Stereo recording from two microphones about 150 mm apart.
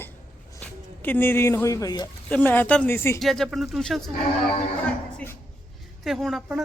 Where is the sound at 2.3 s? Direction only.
10° left (ahead or behind).